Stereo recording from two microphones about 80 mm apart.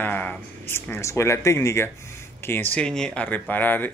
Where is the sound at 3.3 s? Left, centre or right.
Left.